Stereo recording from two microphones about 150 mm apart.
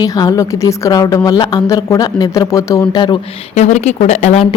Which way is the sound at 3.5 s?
50° left (ahead or behind).